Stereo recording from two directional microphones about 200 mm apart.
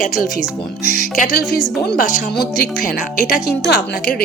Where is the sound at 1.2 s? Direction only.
50° left (ahead or behind).